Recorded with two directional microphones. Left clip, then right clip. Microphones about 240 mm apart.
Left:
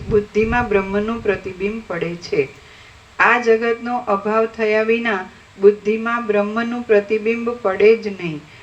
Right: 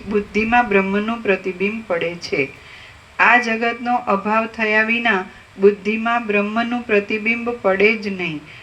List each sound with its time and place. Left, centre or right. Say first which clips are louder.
0.1 s speech: left 1 dB; right